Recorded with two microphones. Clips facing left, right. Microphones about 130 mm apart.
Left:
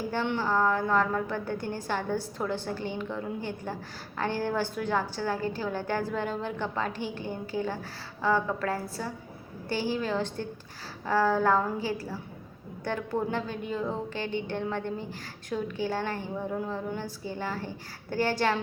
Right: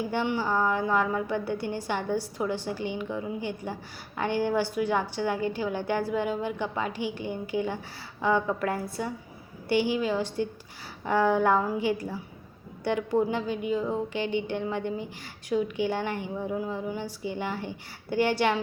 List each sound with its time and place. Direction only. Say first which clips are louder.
0.1 s a woman's voice: left 2 dB; 10° right (ahead or behind)